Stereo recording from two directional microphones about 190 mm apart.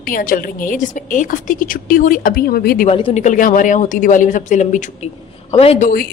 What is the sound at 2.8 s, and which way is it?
Speech, 30° left (ahead or behind).